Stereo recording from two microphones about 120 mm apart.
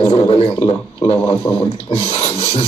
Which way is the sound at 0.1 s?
55° left (ahead or behind).